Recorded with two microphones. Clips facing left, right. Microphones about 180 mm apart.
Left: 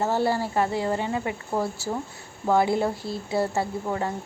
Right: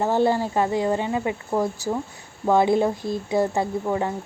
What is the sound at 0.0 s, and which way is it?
A woman's voice, 20° right (ahead or behind).